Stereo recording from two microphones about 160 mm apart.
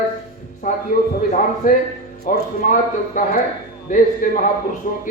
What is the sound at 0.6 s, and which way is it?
A man's voice, 50° left (ahead or behind).